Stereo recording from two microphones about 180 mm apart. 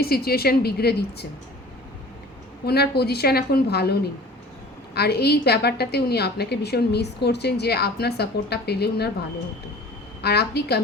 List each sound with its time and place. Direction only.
0.0 s a woman's voice: 60° left (ahead or behind)
2.6 s a woman's voice: 60° left (ahead or behind)
4.9 s a woman's voice: 60° left (ahead or behind)
10.2 s a woman's voice: 65° left (ahead or behind)